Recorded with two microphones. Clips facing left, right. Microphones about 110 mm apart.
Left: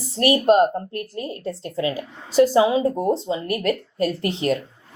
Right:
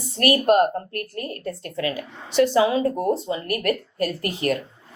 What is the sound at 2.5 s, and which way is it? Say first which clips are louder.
Speech: left 2 dB; 25° left (ahead or behind).